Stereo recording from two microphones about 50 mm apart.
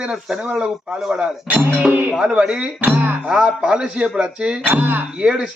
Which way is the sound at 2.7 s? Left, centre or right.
Right.